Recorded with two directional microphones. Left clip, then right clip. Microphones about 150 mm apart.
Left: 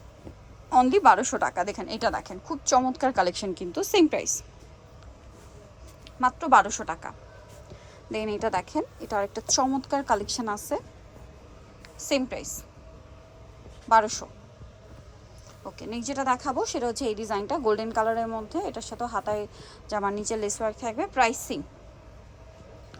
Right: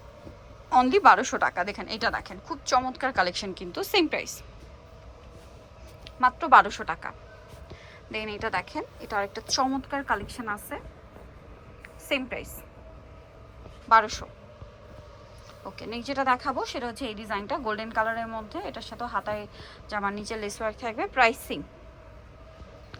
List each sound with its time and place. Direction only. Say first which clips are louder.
0.7 s a woman's voice: even; 20° left (ahead or behind)
6.1 s a woman's voice: right 2 dB; 20° left (ahead or behind)
11.8 s a woman's voice: left 2 dB; 20° left (ahead or behind)
13.8 s a woman's voice: even; 25° left (ahead or behind)
15.6 s a woman's voice: even; 25° left (ahead or behind)